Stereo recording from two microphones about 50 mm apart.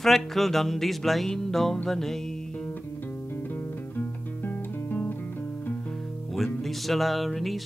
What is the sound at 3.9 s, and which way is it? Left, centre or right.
Music, left.